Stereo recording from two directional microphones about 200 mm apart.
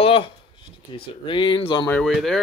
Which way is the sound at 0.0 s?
25° left (ahead or behind).